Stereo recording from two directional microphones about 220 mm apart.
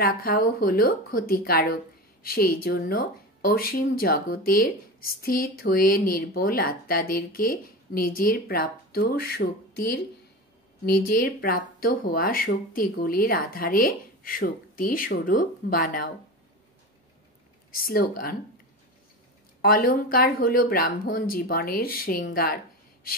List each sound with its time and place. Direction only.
0.0 s speech: 40° left (ahead or behind)
17.7 s speech: 40° left (ahead or behind)
19.6 s speech: 40° left (ahead or behind)